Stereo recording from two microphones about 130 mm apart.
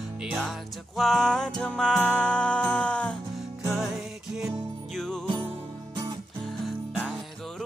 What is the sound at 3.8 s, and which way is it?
Music, centre (ahead or behind).